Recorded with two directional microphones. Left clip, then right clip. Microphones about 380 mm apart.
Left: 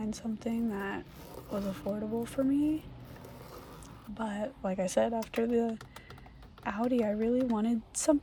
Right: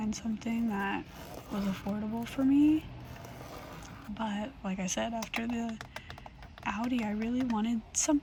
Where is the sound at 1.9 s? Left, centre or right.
Left.